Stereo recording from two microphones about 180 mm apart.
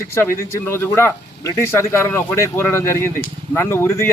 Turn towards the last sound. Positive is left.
turn(degrees=15)  # may be behind; listen again after turning